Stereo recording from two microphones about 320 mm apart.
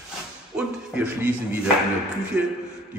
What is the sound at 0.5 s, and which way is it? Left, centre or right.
Music, centre.